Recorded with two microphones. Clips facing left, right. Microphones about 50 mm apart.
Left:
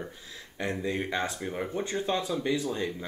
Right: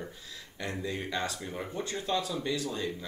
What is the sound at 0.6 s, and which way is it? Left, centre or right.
Speech, left.